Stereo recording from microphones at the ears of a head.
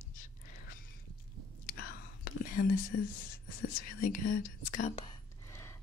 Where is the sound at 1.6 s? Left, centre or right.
Left.